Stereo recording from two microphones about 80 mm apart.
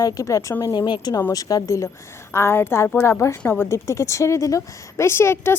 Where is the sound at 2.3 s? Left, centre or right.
Left.